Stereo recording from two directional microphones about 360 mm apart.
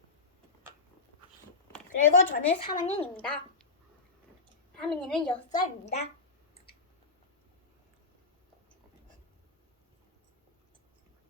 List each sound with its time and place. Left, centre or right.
2.0 s speech: centre
2.9 s a woman's voice: centre
4.8 s a woman's voice: centre